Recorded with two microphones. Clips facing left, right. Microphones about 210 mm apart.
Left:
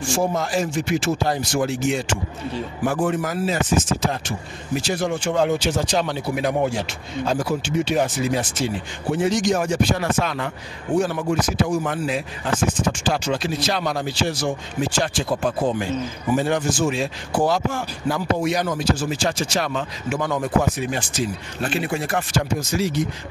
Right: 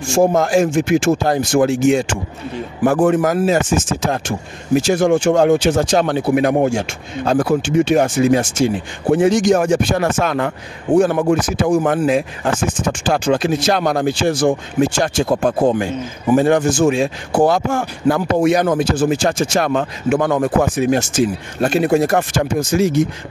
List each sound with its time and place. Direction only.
0.1 s speech: 45° right (ahead or behind)
3.0 s speech: 70° right (ahead or behind)
3.3 s speech: 50° right (ahead or behind)
15.6 s speech: 60° right (ahead or behind)